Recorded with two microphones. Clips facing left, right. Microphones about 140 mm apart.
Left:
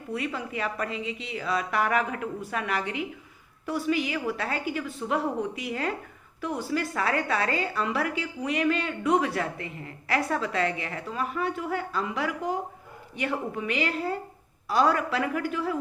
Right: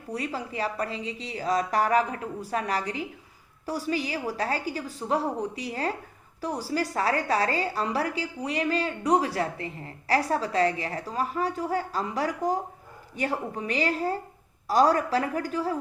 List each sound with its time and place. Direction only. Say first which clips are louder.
0.1 s a woman's voice: even; 35° right (ahead or behind)